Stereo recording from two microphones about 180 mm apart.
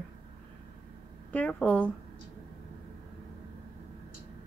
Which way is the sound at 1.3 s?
10° left (ahead or behind).